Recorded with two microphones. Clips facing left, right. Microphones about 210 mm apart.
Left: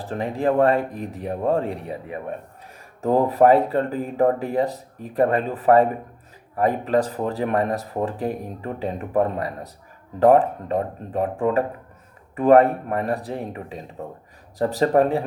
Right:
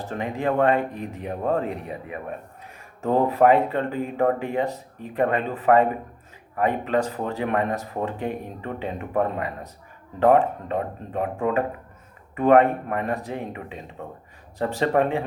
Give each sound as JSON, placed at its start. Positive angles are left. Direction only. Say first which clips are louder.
{"t": 0.0, "sound": "speech", "louder": "left 3 dB", "side_deg": 35}